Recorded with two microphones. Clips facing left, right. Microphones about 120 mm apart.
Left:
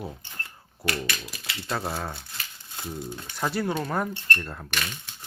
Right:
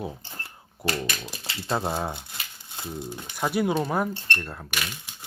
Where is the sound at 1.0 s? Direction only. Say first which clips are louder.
Right 1 dB; 30° right (ahead or behind).